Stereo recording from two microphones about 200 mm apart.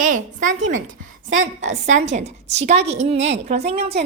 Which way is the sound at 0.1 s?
40° right (ahead or behind).